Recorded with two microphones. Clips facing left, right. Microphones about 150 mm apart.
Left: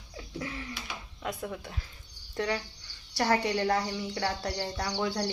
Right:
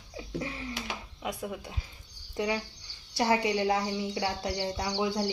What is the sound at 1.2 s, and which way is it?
A woman's voice, 10° right (ahead or behind).